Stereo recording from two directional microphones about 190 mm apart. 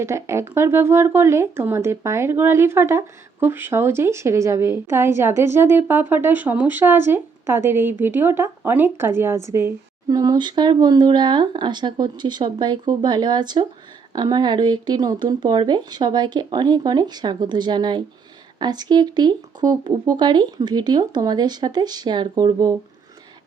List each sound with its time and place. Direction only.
0.0 s a woman's voice: 15° right (ahead or behind)